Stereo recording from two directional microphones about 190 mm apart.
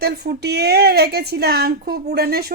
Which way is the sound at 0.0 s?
60° right (ahead or behind).